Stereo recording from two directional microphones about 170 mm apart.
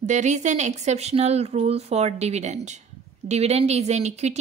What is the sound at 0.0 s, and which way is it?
A woman's voice, 45° right (ahead or behind).